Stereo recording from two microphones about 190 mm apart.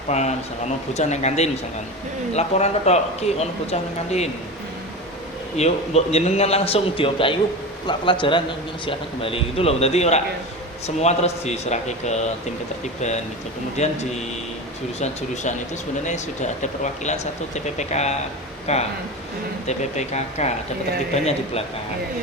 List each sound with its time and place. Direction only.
0.1 s speech: 35° left (ahead or behind)
5.5 s a man's voice: 35° left (ahead or behind)